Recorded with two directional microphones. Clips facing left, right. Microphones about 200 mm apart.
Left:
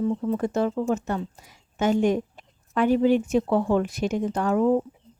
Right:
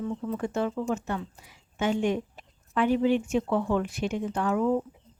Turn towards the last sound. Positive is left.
turn(degrees=40)  # may be behind; listen again after turning